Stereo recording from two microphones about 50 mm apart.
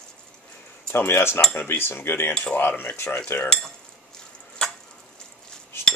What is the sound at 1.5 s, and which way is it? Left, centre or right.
Cutlery, left.